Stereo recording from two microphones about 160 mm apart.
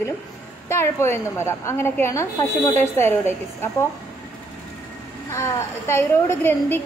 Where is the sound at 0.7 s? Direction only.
15° left (ahead or behind).